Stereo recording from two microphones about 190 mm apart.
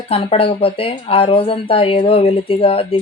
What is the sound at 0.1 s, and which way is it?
Speech, 30° left (ahead or behind).